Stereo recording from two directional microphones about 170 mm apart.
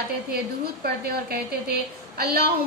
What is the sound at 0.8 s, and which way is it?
A woman's voice, 65° right (ahead or behind).